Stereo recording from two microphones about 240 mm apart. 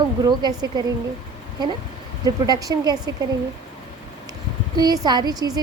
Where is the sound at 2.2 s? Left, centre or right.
Centre.